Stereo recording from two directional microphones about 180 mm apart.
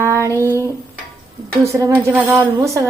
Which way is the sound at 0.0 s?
15° right (ahead or behind).